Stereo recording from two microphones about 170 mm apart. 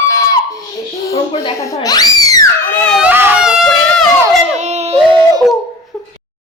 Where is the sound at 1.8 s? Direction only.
20° left (ahead or behind).